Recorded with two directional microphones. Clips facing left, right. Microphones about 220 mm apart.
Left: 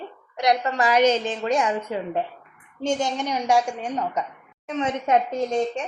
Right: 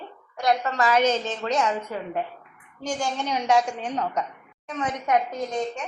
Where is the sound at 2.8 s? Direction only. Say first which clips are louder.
Left 4 dB; 20° left (ahead or behind).